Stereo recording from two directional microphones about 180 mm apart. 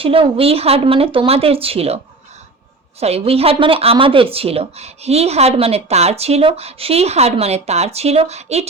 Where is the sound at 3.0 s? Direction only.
35° right (ahead or behind).